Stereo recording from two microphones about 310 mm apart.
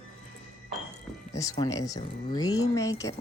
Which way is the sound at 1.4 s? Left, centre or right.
Centre.